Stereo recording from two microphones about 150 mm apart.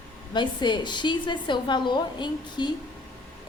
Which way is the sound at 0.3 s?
30° left (ahead or behind).